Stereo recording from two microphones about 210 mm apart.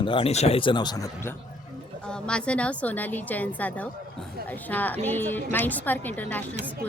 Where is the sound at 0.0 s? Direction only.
25° left (ahead or behind).